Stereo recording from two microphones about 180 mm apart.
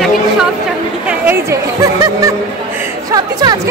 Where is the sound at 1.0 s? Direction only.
10° right (ahead or behind).